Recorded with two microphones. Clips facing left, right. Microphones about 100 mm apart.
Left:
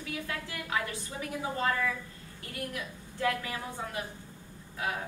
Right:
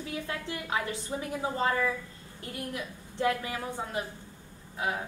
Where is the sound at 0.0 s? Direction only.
25° right (ahead or behind).